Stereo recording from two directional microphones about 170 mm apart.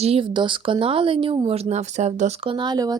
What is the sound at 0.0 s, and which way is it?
Speech, 35° right (ahead or behind).